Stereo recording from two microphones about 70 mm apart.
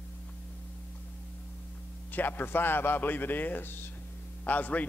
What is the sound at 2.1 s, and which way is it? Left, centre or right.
Speech, left.